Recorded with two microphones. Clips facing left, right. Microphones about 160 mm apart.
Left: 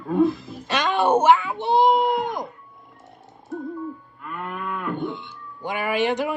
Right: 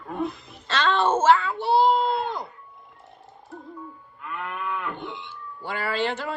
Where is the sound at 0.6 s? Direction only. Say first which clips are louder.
Left 2 dB; 15° left (ahead or behind).